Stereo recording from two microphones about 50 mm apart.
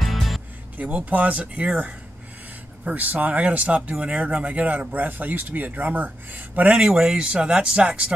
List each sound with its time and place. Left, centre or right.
0.0 s music: centre
0.7 s speech: right
2.8 s speech: right
7.0 s speech: centre